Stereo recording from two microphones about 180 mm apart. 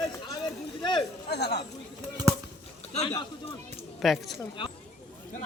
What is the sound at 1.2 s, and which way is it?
Speech, 65° left (ahead or behind).